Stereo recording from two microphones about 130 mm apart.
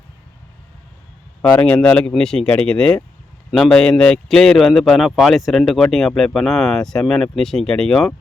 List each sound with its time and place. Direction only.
1.5 s speech: 10° left (ahead or behind)